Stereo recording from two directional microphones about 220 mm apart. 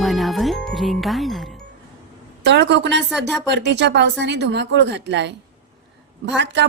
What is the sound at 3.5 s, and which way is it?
A woman's voice, 50° right (ahead or behind).